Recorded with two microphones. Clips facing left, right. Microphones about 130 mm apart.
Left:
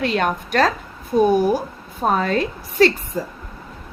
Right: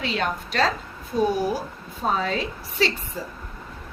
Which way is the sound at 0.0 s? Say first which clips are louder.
Left 6 dB; 55° left (ahead or behind).